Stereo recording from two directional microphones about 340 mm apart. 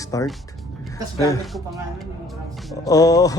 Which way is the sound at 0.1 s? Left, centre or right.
Centre.